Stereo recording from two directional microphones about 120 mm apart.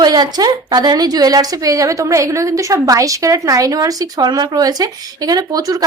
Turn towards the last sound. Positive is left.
turn(degrees=-30)  # may be behind; listen again after turning